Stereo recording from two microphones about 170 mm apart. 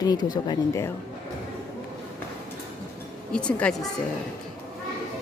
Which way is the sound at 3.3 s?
5° left (ahead or behind).